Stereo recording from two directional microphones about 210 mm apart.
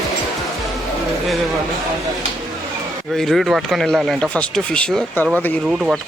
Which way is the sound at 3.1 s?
Centre (ahead or behind).